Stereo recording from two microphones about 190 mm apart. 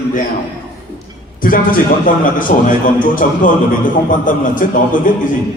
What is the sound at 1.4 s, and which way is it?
A man's voice, 45° left (ahead or behind).